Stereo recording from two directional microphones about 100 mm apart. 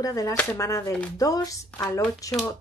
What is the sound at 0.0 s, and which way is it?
Speech, 35° left (ahead or behind).